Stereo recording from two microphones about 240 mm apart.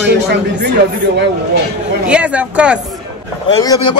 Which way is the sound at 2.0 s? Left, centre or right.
Centre.